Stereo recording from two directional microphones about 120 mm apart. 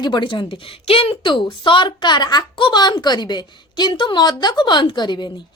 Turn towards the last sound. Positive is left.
turn(degrees=40)  # may be behind; listen again after turning